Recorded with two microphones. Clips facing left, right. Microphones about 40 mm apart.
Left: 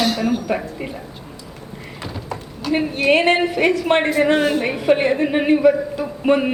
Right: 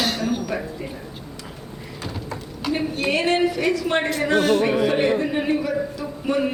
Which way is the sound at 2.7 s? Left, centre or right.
Left.